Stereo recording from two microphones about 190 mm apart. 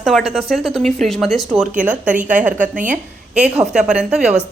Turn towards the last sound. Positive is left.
turn(degrees=-5)  # may be behind; listen again after turning